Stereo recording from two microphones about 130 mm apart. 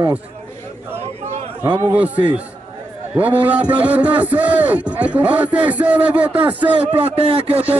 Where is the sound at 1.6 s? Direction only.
20° right (ahead or behind).